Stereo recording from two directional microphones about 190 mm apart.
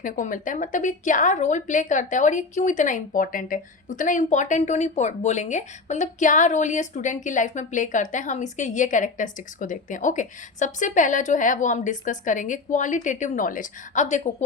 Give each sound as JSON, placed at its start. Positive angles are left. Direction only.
{"t": 0.0, "sound": "a woman's voice", "side_deg": 45}